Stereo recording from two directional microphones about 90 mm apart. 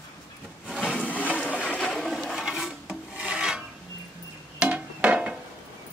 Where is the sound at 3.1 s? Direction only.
15° right (ahead or behind).